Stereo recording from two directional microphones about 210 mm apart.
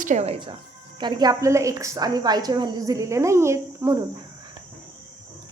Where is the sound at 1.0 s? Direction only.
20° right (ahead or behind).